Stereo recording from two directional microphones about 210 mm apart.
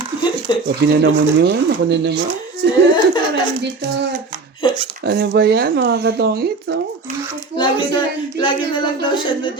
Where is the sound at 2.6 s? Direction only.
55° right (ahead or behind).